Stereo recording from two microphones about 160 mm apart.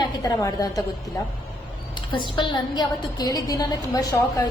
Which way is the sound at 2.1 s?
30° left (ahead or behind).